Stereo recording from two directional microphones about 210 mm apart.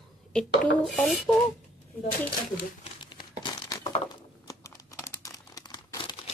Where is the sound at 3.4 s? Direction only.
20° left (ahead or behind).